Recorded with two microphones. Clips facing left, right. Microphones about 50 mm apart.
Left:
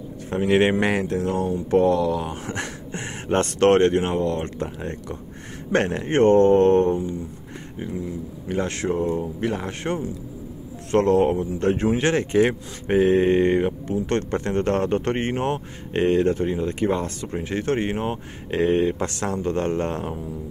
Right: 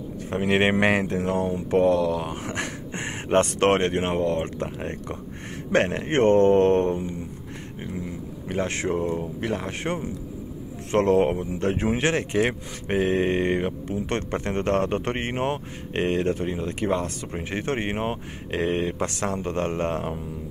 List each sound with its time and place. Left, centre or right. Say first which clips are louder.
0.3 s speech: left 3 dB; centre
1.7 s speech: left 1 dB; centre
2.9 s a sound: even; centre
3.3 s speech: left 2 dB; centre
8.6 s speech: left 1 dB; centre
17.3 s speech: left 5 dB; centre
18.5 s speech: left 5 dB; centre